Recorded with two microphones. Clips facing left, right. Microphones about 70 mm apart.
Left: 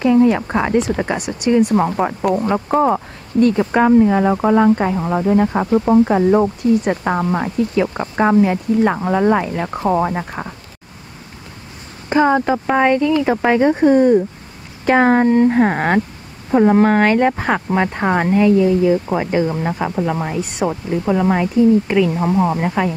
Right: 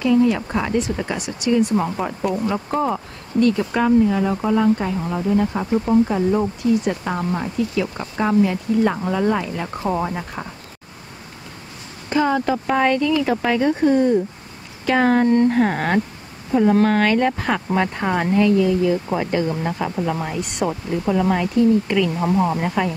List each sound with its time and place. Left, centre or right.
0.0 s a sound: left
0.4 s speech: left
0.7 s speech: left
1.8 s speech: left
12.1 s speech: left
15.3 s speech: centre